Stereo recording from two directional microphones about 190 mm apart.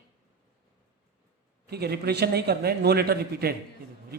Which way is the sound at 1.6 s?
60° right (ahead or behind).